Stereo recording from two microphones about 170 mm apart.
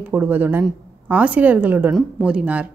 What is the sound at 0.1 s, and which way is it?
A woman's voice, 10° right (ahead or behind).